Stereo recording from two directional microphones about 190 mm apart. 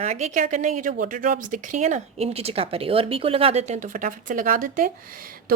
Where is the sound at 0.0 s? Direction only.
40° right (ahead or behind).